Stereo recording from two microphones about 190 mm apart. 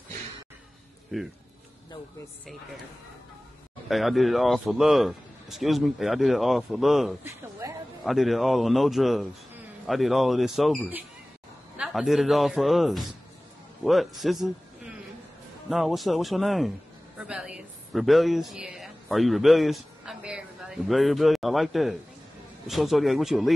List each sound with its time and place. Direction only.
1.1 s a man's voice: centre (ahead or behind)
3.9 s a man's voice: centre (ahead or behind)
7.6 s a sound: 15° right (ahead or behind)
8.0 s a man's voice: centre (ahead or behind)
17.2 s a sound: 5° right (ahead or behind)
22.7 s a man's voice: centre (ahead or behind)